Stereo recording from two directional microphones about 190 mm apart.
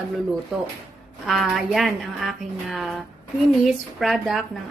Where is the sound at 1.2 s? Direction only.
Centre (ahead or behind).